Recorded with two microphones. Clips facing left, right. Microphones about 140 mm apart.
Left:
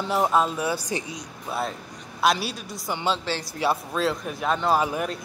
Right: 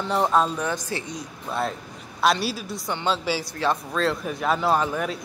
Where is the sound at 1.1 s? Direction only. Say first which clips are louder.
Right 1 dB; centre (ahead or behind).